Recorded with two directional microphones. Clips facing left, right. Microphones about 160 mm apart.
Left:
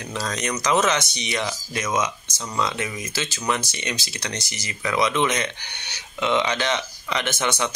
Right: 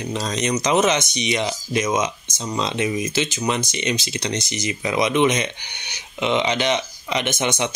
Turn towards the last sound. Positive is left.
turn(degrees=-20)  # may be behind; listen again after turning